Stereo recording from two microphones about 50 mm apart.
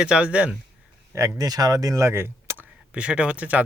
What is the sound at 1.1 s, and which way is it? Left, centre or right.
Speech, right.